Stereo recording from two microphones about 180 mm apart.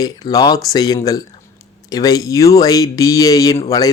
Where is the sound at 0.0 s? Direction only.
20° left (ahead or behind).